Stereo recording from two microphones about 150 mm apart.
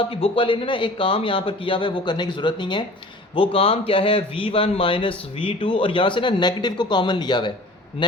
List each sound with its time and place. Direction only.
0.0 s speech: 35° left (ahead or behind)